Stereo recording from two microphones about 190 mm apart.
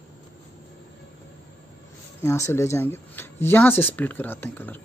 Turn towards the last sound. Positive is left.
turn(degrees=10)  # may be behind; listen again after turning